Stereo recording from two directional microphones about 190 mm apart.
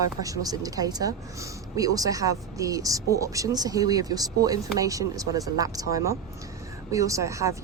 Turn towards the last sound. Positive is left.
turn(degrees=-15)  # may be behind; listen again after turning